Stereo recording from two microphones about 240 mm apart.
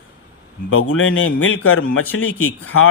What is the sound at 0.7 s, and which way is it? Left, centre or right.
A man's voice, left.